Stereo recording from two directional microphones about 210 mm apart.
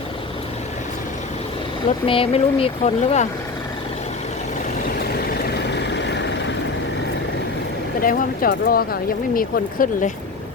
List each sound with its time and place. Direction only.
2.0 s speech: 25° left (ahead or behind)
5.5 s vehicle: 55° left (ahead or behind)
8.0 s speech: 45° left (ahead or behind)